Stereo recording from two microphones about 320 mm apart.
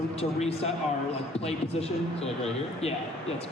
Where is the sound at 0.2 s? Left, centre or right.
Centre.